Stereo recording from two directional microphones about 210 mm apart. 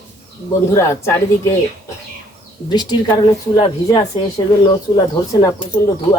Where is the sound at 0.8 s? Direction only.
10° left (ahead or behind).